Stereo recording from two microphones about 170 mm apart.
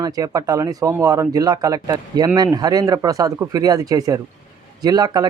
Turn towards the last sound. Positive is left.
turn(degrees=-25)  # may be behind; listen again after turning